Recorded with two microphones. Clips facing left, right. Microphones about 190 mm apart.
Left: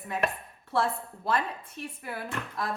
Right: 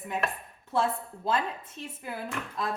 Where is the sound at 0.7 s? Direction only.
20° right (ahead or behind).